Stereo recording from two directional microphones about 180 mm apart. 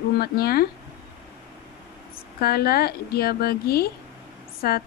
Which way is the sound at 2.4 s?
60° left (ahead or behind).